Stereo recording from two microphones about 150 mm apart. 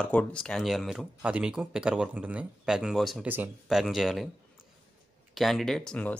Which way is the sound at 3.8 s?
Centre (ahead or behind).